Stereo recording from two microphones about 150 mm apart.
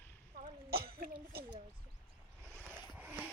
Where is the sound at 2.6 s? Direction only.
10° right (ahead or behind).